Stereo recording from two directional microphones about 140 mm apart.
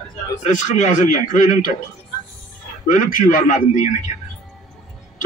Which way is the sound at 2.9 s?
70° left (ahead or behind).